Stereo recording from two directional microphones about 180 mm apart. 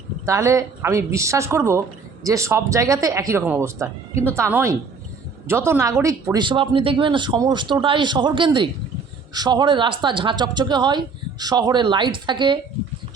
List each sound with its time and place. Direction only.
0.3 s speech: 15° right (ahead or behind)